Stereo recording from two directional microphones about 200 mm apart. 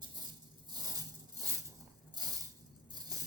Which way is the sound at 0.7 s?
20° right (ahead or behind).